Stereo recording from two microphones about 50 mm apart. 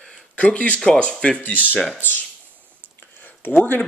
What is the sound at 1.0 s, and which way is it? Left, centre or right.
Speech, left.